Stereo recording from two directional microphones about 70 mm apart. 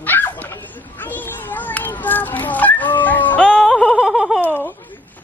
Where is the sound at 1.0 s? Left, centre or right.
Left.